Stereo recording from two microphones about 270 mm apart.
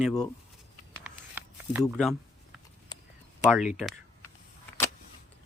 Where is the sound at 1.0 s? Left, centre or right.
Centre.